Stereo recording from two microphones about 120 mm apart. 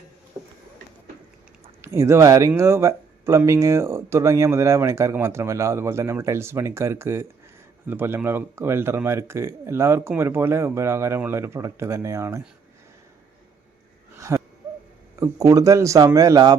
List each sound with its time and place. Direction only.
1.8 s speech: 25° right (ahead or behind)
14.2 s a sound: 25° right (ahead or behind)
15.2 s speech: 25° right (ahead or behind)